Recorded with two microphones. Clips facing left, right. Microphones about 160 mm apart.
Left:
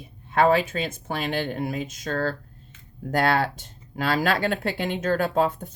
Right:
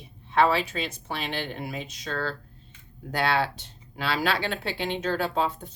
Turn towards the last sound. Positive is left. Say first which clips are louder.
# left 4 dB
turn(degrees=50)  # may be behind; listen again after turning